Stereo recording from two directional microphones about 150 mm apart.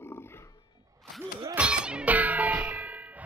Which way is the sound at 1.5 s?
5° right (ahead or behind).